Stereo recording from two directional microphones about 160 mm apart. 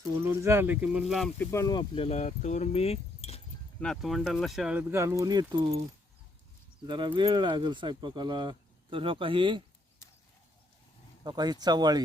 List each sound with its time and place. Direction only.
0.2 s speech: 15° right (ahead or behind)
1.4 s speech: 15° left (ahead or behind); by 3.4 s 40° left (ahead or behind)
3.8 s speech: centre (ahead or behind); by 5.8 s 30° right (ahead or behind)
6.8 s speech: 30° right (ahead or behind)
11.2 s speech: 25° right (ahead or behind)